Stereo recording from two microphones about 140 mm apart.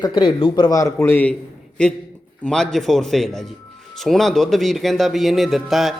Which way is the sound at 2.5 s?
5° left (ahead or behind).